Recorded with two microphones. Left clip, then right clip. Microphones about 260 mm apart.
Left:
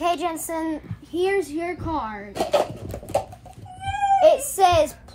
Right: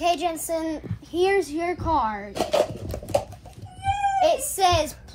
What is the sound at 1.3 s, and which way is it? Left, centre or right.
Speech, centre.